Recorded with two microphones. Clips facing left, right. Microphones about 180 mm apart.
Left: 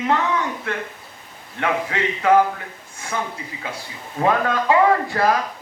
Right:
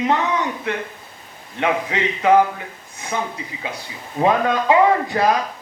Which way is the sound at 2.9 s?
20° right (ahead or behind).